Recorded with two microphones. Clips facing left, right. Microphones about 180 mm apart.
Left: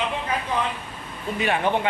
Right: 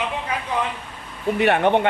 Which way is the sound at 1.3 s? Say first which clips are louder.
Right 5 dB; 65° right (ahead or behind).